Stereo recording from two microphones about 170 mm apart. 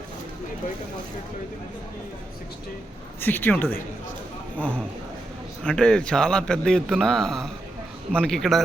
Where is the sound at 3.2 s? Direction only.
10° left (ahead or behind).